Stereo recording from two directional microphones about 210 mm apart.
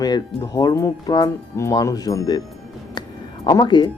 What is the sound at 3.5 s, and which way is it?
Speech, 20° left (ahead or behind).